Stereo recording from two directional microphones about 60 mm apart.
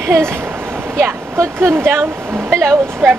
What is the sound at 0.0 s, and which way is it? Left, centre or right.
Speech, right.